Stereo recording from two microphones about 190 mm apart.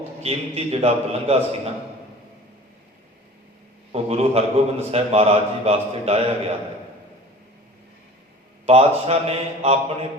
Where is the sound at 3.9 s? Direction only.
30° right (ahead or behind).